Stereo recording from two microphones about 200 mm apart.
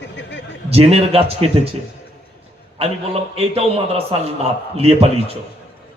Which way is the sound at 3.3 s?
30° right (ahead or behind).